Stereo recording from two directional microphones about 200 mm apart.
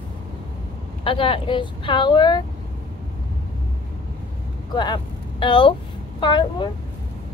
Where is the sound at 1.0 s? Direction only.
25° left (ahead or behind).